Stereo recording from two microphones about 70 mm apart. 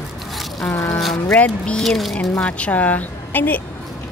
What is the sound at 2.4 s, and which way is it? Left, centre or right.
A woman's voice, centre.